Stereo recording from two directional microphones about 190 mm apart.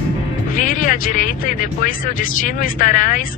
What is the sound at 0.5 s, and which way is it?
Speech, 45° left (ahead or behind).